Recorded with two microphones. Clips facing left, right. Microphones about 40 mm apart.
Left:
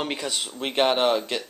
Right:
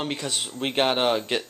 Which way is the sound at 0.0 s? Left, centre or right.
Centre.